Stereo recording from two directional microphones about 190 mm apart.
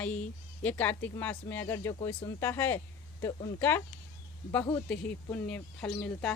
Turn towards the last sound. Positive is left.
turn(degrees=10)  # may be behind; listen again after turning